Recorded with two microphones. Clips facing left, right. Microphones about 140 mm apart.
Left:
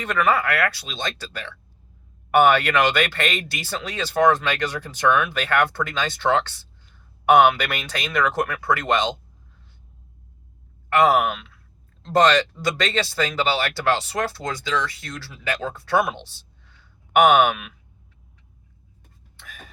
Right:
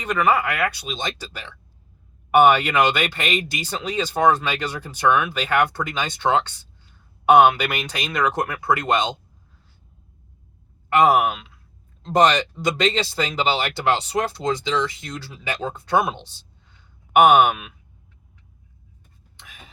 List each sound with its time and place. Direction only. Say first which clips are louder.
0.0 s speech: right 1 dB; 15° right (ahead or behind)
10.8 s speech: right 1 dB; 15° right (ahead or behind)
17.1 s speech: right 1 dB; 10° right (ahead or behind)